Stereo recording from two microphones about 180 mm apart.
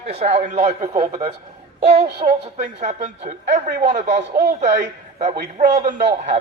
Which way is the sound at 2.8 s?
40° right (ahead or behind).